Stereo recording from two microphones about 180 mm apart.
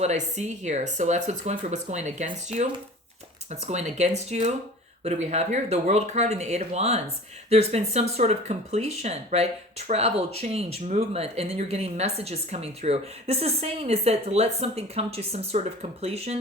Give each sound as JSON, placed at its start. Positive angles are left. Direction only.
{"t": 0.0, "sound": "speech", "side_deg": -40}